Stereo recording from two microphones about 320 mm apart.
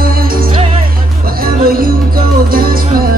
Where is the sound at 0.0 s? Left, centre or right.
Right.